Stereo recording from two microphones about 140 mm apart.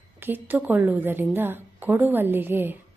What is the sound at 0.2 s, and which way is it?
A woman's voice, 15° right (ahead or behind).